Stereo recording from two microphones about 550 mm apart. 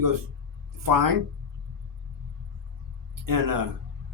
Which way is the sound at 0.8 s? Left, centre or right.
Right.